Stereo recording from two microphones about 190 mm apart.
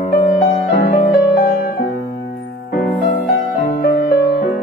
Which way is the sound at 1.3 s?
55° left (ahead or behind).